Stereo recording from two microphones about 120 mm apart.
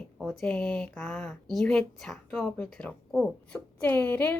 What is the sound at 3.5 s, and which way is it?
Speech, 15° left (ahead or behind).